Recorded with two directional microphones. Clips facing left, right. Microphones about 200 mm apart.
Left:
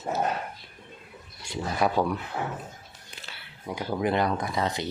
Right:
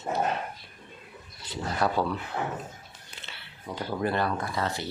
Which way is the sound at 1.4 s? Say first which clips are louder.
Left 2 dB; 15° left (ahead or behind).